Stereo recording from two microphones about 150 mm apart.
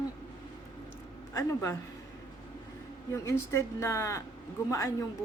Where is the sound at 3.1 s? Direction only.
20° left (ahead or behind).